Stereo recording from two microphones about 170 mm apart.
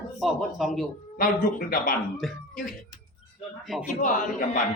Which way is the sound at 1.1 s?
55° left (ahead or behind).